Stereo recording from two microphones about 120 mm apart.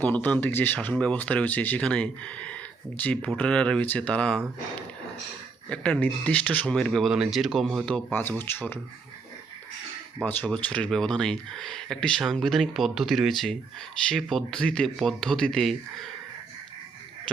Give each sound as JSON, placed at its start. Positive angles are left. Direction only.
{"t": 0.0, "sound": "speech", "side_deg": 15}
{"t": 5.6, "sound": "speech", "side_deg": 10}
{"t": 10.2, "sound": "speech", "side_deg": 10}